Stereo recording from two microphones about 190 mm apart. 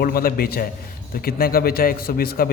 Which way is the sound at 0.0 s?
50° left (ahead or behind).